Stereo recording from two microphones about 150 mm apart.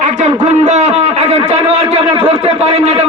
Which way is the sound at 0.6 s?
50° right (ahead or behind).